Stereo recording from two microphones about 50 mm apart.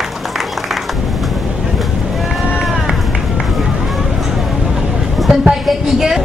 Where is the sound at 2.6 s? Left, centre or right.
Centre.